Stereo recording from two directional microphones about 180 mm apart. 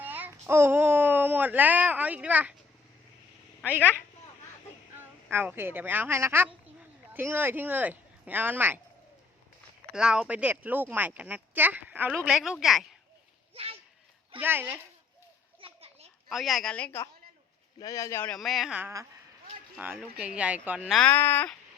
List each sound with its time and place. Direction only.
0.0 s speech: 10° right (ahead or behind)
3.7 s speech: 10° right (ahead or behind)
4.9 s speech: 10° right (ahead or behind)
9.9 s speech: 5° right (ahead or behind)
13.5 s a child's voice: 30° right (ahead or behind)
14.3 s speech: 10° right (ahead or behind)
15.6 s children playing: 35° right (ahead or behind)
16.3 s speech: centre (ahead or behind)
18.3 s speech: centre (ahead or behind)
21.0 s speech: 10° left (ahead or behind)